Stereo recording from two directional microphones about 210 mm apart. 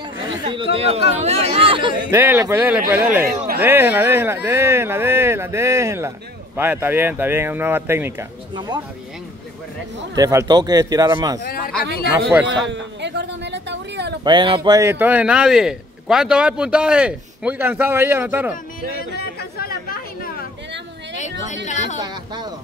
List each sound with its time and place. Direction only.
0.3 s speech: 25° right (ahead or behind)
2.1 s speech: 10° right (ahead or behind)
10.1 s speech: 15° right (ahead or behind)
11.4 s speech: 45° left (ahead or behind)
12.6 s a sound: 55° right (ahead or behind)
14.2 s speech: 20° right (ahead or behind)
19.1 s chatter: 45° left (ahead or behind)
21.6 s a woman's voice: 35° left (ahead or behind)
22.0 s speech: 20° right (ahead or behind)